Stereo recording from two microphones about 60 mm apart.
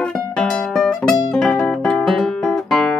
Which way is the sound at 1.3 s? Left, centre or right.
Centre.